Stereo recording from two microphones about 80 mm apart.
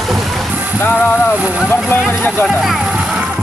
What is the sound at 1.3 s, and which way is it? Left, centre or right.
Speech, centre.